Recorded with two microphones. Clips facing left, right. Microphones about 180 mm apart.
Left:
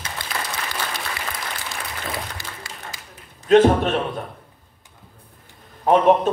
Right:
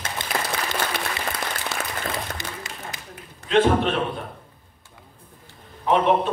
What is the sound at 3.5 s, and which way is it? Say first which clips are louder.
Speech: left 4 dB; 45° left (ahead or behind).